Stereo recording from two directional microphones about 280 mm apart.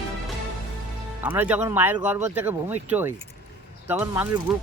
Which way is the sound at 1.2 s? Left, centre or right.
Centre.